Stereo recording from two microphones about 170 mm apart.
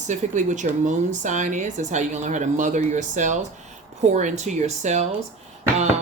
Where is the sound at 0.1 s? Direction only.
45° right (ahead or behind).